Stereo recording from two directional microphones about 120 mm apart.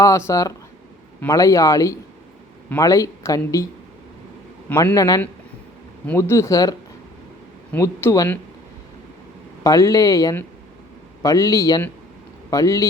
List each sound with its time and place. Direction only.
0.0 s speech: 25° left (ahead or behind)
4.9 s speech: 30° left (ahead or behind)
9.6 s speech: 25° left (ahead or behind)